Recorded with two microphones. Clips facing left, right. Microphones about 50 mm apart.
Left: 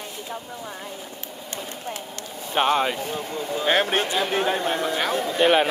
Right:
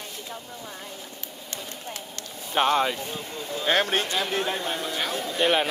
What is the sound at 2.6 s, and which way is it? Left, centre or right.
Speech, centre.